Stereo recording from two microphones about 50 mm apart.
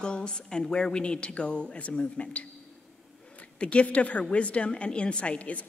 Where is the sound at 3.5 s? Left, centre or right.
Left.